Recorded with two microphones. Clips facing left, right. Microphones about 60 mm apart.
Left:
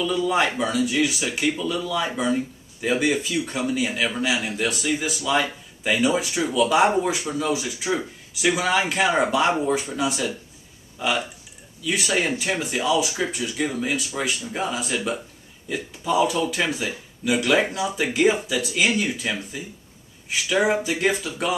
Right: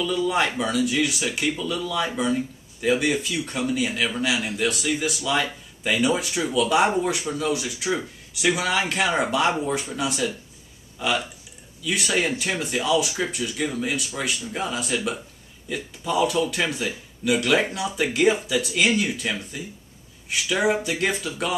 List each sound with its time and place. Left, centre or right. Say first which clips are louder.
0.0 s speech: left 1 dB; centre